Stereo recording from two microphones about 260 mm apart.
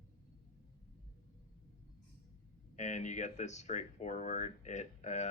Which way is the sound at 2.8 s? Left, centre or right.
Left.